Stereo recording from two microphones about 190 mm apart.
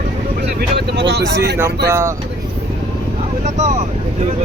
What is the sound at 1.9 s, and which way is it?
Speech, 15° right (ahead or behind).